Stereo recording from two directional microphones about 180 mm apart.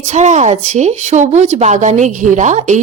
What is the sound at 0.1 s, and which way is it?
A woman's voice, 40° right (ahead or behind).